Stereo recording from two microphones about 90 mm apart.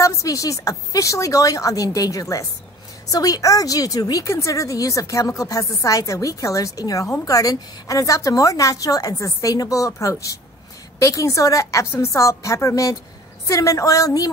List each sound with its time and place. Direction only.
0.0 s a woman's voice: 40° left (ahead or behind)